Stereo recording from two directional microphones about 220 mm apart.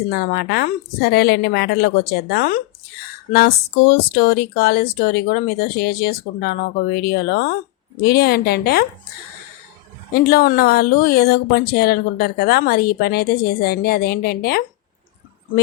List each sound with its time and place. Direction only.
0.1 s speech: 45° left (ahead or behind)
10.2 s speech: 45° left (ahead or behind)